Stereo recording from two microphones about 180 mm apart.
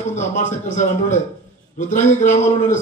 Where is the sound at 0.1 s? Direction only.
45° left (ahead or behind).